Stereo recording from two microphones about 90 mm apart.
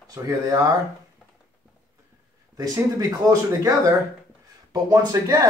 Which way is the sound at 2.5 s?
40° right (ahead or behind).